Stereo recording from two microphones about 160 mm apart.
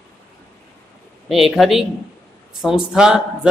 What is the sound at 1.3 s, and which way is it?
Speech, centre (ahead or behind).